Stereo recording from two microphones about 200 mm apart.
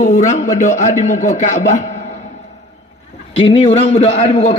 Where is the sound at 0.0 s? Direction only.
40° left (ahead or behind).